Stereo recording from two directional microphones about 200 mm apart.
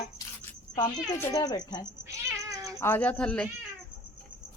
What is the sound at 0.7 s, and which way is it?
Speech, 15° left (ahead or behind).